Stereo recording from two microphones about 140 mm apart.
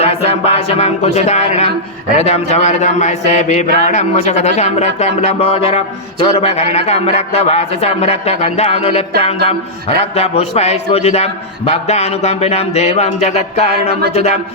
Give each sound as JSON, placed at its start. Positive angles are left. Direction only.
{"t": 0.0, "sound": "a man's voice", "side_deg": 45}